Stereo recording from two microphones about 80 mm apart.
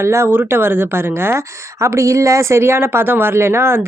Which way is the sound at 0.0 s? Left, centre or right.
Right.